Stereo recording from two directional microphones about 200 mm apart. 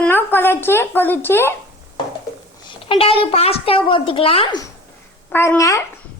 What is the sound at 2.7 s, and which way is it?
Speech, 25° left (ahead or behind).